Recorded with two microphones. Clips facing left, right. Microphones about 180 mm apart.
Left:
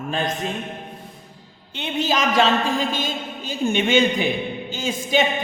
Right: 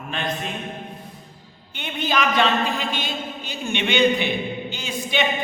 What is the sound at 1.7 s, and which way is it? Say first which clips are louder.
A man's voice: left 2 dB; 35° left (ahead or behind).